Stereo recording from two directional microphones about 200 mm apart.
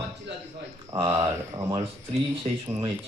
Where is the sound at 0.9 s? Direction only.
20° right (ahead or behind).